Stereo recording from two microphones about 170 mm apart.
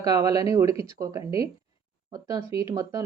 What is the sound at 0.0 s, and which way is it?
Speech, 20° right (ahead or behind).